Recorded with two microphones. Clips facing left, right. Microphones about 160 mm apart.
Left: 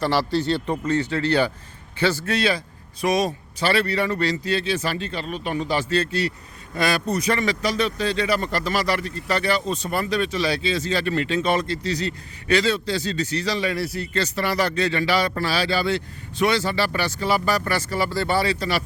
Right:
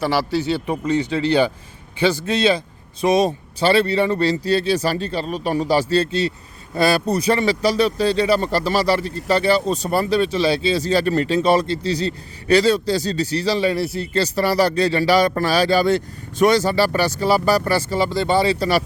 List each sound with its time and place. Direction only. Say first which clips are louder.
0.0 s speech: right 2 dB; 5° right (ahead or behind); by 18.5 s 20° right (ahead or behind)